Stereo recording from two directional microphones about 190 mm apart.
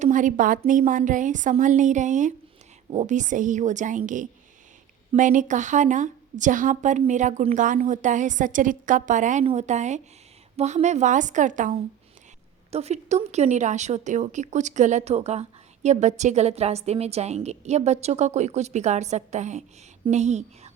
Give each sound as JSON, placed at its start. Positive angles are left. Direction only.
{"t": 0.0, "sound": "speech", "side_deg": -40}